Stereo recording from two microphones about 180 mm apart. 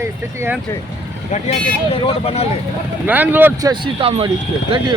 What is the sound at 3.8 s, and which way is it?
Speech, 30° right (ahead or behind).